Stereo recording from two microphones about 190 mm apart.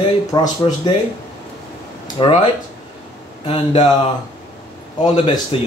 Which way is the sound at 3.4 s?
30° left (ahead or behind).